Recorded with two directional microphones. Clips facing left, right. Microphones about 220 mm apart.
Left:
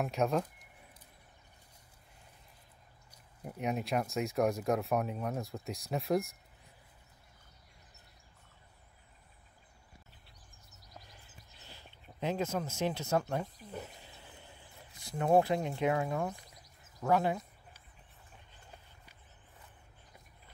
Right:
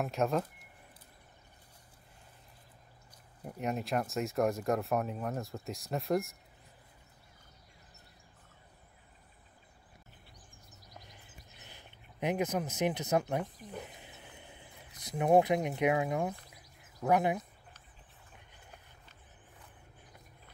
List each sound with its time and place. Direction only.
0.0 s speech: centre (ahead or behind)
3.4 s speech: centre (ahead or behind)
11.0 s a sound: 20° right (ahead or behind)
16.1 s speech: 15° right (ahead or behind)